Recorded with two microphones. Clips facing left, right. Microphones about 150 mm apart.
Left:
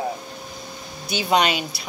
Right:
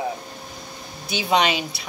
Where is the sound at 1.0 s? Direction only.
25° right (ahead or behind).